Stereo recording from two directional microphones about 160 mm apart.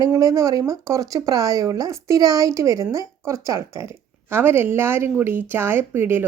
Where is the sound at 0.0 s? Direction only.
20° right (ahead or behind).